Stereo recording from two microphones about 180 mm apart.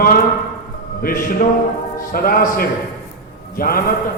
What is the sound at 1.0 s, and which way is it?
A man's voice, 55° left (ahead or behind).